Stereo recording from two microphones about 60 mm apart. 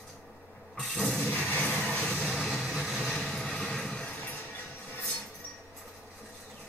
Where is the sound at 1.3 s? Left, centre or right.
Left.